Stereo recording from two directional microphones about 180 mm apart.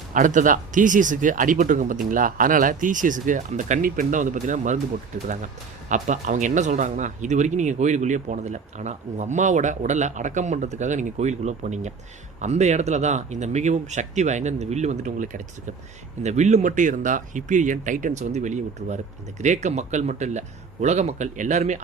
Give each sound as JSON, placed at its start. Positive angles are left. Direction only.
{"t": 0.1, "sound": "speech", "side_deg": -45}
{"t": 5.9, "sound": "speech", "side_deg": -45}